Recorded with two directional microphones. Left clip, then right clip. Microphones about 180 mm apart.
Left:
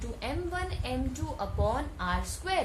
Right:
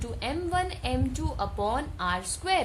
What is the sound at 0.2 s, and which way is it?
A woman's voice, 45° right (ahead or behind).